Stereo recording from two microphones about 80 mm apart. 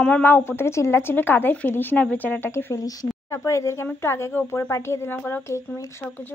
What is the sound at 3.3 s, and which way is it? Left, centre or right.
A woman's voice, left.